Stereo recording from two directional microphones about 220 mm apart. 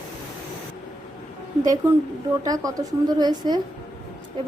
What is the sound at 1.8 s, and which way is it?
A woman's voice, 10° right (ahead or behind).